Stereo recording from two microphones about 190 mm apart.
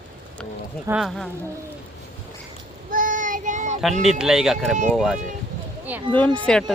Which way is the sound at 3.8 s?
Centre (ahead or behind).